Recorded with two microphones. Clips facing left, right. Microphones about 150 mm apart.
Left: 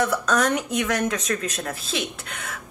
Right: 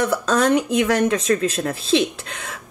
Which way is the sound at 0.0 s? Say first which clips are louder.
Right 3 dB; 30° right (ahead or behind).